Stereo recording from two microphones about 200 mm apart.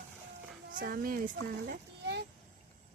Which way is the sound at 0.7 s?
45° right (ahead or behind).